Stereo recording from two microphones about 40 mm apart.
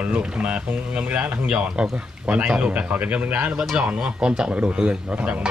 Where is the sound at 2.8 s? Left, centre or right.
Right.